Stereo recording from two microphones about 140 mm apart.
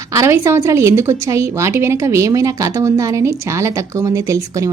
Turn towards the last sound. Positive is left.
turn(degrees=-25)  # may be behind; listen again after turning